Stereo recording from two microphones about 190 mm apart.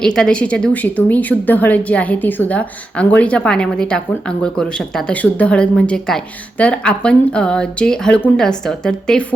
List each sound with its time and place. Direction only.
0.0 s a woman's voice: 5° left (ahead or behind)